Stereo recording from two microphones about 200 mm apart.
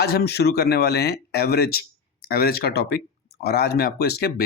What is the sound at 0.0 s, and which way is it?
Speech, 50° left (ahead or behind).